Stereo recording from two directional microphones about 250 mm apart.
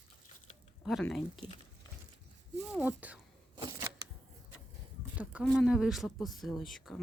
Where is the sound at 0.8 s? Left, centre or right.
Centre.